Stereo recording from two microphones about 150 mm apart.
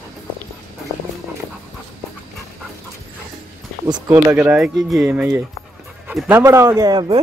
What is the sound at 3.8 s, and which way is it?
Speech, 20° right (ahead or behind).